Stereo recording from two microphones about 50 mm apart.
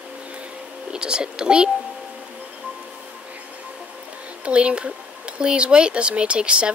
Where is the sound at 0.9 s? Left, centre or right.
Centre.